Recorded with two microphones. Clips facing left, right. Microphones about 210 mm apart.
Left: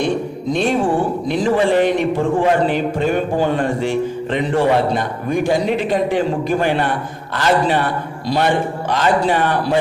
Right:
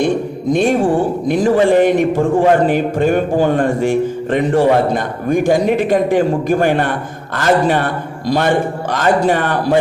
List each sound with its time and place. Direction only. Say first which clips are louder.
0.0 s music: right 3 dB; 50° right (ahead or behind)
1.3 s a man's voice: right 4 dB; 45° right (ahead or behind)